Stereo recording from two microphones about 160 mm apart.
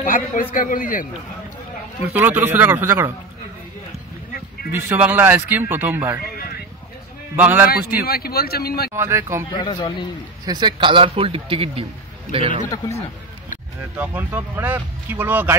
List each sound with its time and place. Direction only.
0.0 s a man's voice: 60° left (ahead or behind)
2.1 s speech: 10° right (ahead or behind)
4.6 s speech: 15° right (ahead or behind)
6.1 s a sound: 70° left (ahead or behind)
7.3 s speech: 10° right (ahead or behind)
7.7 s speech: 70° left (ahead or behind)
8.9 s speech: 15° right (ahead or behind)
9.5 s a man's voice: 30° left (ahead or behind)
10.4 s a man's voice: 25° right (ahead or behind)
12.6 s a man's voice: 20° left (ahead or behind)
13.9 s speech: 10° right (ahead or behind)